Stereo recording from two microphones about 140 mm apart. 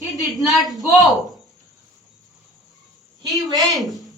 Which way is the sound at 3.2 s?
25° right (ahead or behind).